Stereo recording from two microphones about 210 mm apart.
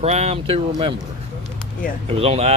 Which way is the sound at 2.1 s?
30° right (ahead or behind).